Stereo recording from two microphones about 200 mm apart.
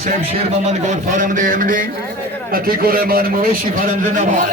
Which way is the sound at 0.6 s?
35° right (ahead or behind).